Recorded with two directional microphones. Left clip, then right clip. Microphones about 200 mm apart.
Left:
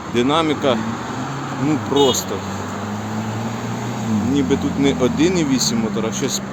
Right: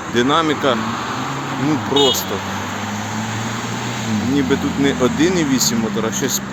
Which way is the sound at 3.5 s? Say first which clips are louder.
Right 3 dB; 50° left (ahead or behind).